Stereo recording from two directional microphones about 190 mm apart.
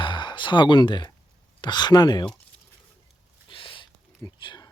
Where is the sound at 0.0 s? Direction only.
25° left (ahead or behind).